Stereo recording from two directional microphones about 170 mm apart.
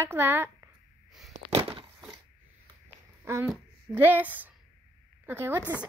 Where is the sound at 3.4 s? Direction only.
10° right (ahead or behind).